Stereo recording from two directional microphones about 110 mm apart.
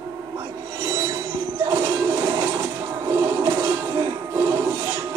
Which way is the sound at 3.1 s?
30° right (ahead or behind).